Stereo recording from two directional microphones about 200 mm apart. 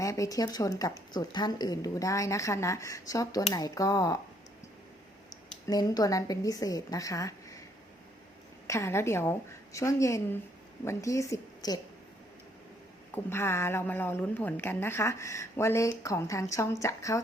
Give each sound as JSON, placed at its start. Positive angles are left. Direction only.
{"t": 0.0, "sound": "a woman's voice", "side_deg": 15}
{"t": 5.6, "sound": "a woman's voice", "side_deg": 20}
{"t": 8.6, "sound": "a woman's voice", "side_deg": 15}
{"t": 13.1, "sound": "a woman's voice", "side_deg": 10}